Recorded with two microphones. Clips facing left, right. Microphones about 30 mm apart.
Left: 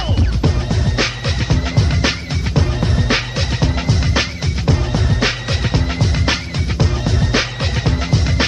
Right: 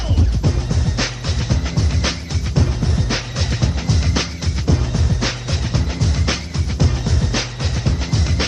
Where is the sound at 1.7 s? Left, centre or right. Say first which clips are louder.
Left 4 dB; left.